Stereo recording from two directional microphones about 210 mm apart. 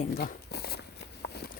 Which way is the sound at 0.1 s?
45° left (ahead or behind).